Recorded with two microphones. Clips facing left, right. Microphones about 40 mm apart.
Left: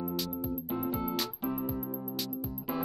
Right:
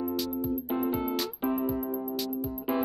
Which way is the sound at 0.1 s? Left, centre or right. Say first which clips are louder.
Right 5 dB; centre.